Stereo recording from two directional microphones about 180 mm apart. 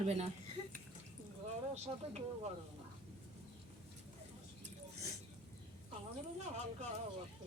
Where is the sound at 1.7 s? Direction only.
35° right (ahead or behind).